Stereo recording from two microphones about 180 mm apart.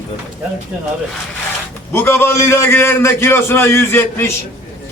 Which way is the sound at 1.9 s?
15° left (ahead or behind).